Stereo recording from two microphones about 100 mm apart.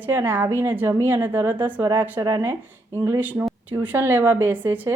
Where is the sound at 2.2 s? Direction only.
35° right (ahead or behind).